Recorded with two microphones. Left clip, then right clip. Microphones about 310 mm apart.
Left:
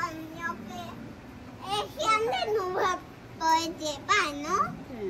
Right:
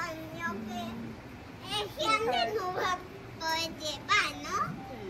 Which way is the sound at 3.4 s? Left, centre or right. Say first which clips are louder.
Left 7 dB; centre.